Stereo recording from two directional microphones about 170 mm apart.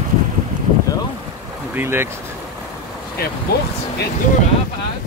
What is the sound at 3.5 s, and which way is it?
Speech, 65° left (ahead or behind).